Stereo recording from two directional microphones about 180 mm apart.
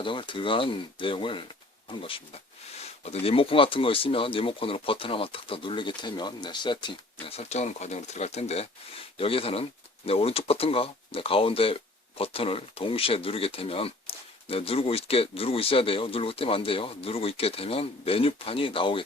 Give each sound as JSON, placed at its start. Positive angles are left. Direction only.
{"t": 0.0, "sound": "speech", "side_deg": 30}